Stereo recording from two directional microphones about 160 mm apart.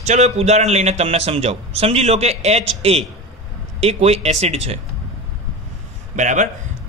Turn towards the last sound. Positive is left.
turn(degrees=-50)  # may be behind; listen again after turning